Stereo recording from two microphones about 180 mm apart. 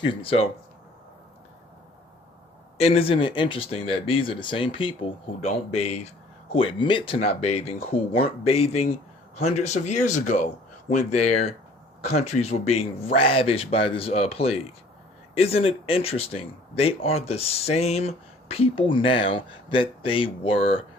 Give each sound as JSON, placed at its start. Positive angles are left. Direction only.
{"t": 0.0, "sound": "speech", "side_deg": 30}
{"t": 2.7, "sound": "speech", "side_deg": 35}